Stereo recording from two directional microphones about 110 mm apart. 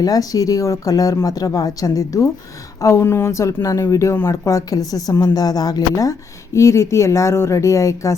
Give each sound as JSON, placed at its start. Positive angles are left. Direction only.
{"t": 0.0, "sound": "speech", "side_deg": 35}